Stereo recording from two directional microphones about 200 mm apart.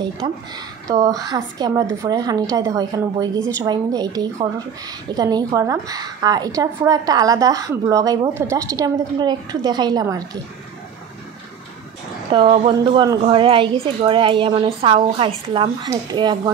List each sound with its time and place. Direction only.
0.8 s a woman's voice: 15° right (ahead or behind)
12.3 s a woman's voice: 25° right (ahead or behind)